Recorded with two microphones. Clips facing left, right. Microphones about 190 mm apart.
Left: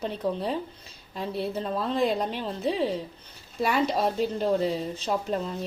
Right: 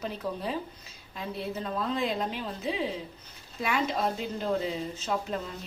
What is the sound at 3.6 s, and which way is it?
Speech, 35° left (ahead or behind).